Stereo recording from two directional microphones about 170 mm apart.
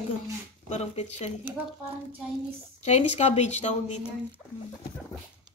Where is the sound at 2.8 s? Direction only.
40° left (ahead or behind).